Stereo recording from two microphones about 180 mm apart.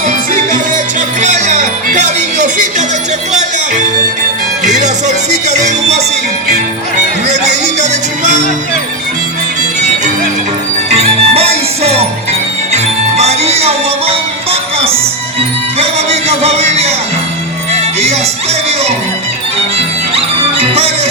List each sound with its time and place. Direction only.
1.2 s music: 40° right (ahead or behind)
4.6 s music: 40° right (ahead or behind)
10.8 s music: 35° right (ahead or behind)
20.1 s music: 35° right (ahead or behind)